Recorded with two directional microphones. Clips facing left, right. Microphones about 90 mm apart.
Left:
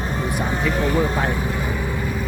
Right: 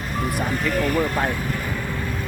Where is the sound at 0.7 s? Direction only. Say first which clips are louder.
Even; 25° left (ahead or behind).